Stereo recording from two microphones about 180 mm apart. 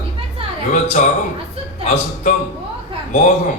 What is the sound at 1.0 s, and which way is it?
Speech, 45° left (ahead or behind).